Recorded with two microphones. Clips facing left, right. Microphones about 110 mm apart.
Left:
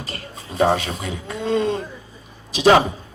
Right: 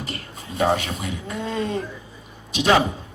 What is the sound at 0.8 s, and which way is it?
Speech, 35° left (ahead or behind).